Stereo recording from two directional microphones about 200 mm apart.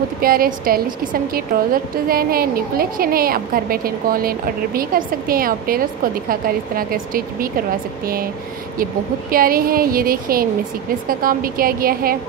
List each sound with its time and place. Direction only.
0.2 s a woman's voice: 45° right (ahead or behind)
9.3 s a woman's voice: 45° right (ahead or behind)